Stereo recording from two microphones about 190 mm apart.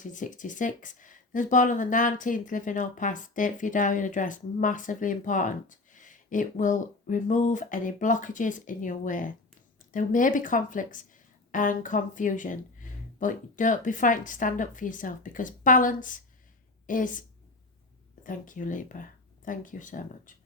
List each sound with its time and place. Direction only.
0.0 s a woman's voice: 40° left (ahead or behind)